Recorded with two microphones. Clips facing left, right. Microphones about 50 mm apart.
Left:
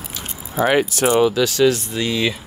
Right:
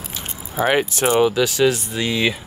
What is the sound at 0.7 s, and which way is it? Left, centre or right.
Speech, right.